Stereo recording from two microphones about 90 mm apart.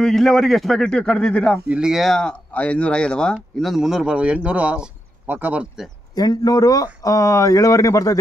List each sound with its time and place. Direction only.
0.0 s speech: 5° left (ahead or behind)
1.7 s speech: 5° right (ahead or behind); by 3.3 s 10° left (ahead or behind)
3.5 s speech: centre (ahead or behind); by 5.7 s 15° right (ahead or behind)
6.1 s speech: 45° left (ahead or behind)